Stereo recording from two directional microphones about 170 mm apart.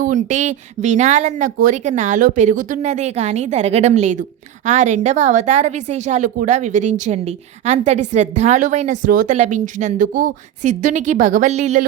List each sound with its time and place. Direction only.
0.0 s speech: 45° right (ahead or behind)